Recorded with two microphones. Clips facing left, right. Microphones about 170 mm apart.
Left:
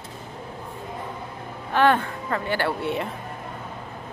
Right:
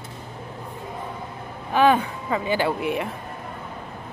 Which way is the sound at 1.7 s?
15° right (ahead or behind).